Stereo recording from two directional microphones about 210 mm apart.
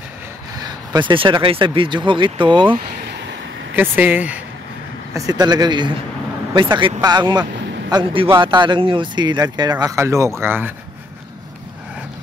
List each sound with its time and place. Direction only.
0.9 s speech: 25° right (ahead or behind)
3.7 s speech: 10° right (ahead or behind)